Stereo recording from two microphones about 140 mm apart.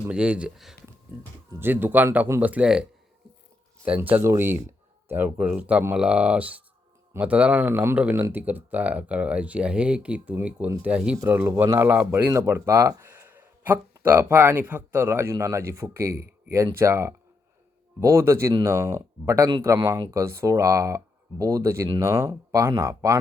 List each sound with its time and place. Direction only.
0.1 s speech: 5° right (ahead or behind)
1.5 s speech: 15° right (ahead or behind)
3.8 s speech: 10° right (ahead or behind)